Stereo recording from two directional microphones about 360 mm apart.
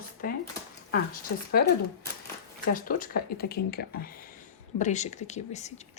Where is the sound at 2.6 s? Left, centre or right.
Left.